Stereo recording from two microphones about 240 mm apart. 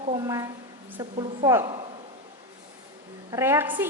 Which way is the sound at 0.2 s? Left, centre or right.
Centre.